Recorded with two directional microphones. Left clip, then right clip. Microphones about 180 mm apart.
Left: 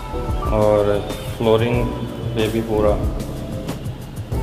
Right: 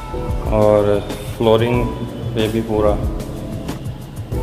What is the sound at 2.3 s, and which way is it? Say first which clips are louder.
Speech: right 1 dB; 35° right (ahead or behind).